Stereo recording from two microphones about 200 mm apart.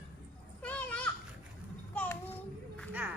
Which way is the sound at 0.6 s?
5° left (ahead or behind).